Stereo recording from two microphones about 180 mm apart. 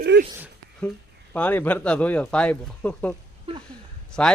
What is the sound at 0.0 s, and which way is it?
Speech, 65° right (ahead or behind).